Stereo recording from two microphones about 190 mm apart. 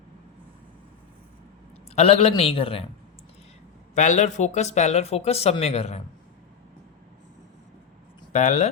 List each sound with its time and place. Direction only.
2.0 s a man's voice: 30° left (ahead or behind)
3.9 s speech: 40° left (ahead or behind)
8.3 s speech: 35° left (ahead or behind)